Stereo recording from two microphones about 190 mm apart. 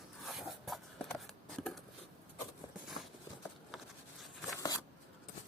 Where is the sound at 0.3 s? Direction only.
Centre (ahead or behind).